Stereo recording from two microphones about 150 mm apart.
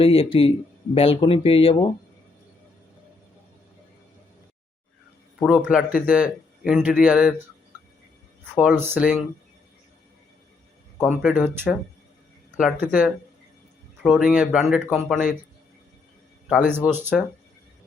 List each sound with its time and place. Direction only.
0.0 s speech: 40° left (ahead or behind)
5.5 s a man's voice: 10° right (ahead or behind)
7.7 s music: 15° right (ahead or behind)
8.5 s a man's voice: 10° right (ahead or behind)
11.1 s a man's voice: 10° right (ahead or behind)
12.5 s a man's voice: 5° right (ahead or behind)
16.5 s a man's voice: 10° right (ahead or behind)